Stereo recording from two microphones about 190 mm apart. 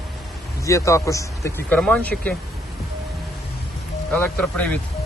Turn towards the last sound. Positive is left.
turn(degrees=5)  # may be behind; listen again after turning